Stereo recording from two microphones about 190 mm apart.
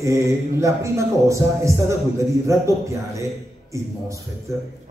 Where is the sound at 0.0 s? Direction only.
15° right (ahead or behind).